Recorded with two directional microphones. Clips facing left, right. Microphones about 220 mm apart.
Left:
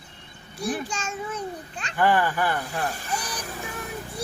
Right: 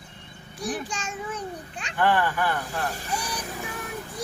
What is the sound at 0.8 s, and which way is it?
A child's voice, 15° right (ahead or behind).